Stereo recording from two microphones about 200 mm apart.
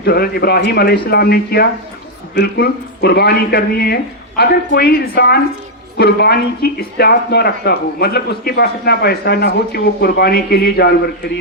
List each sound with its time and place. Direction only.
0.0 s a man's voice: 50° left (ahead or behind)